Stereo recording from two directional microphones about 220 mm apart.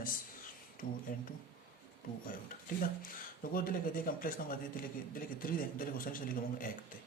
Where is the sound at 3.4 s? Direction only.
40° left (ahead or behind).